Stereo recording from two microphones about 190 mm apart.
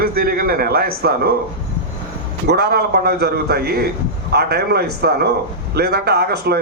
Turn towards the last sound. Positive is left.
turn(degrees=-60)  # may be behind; listen again after turning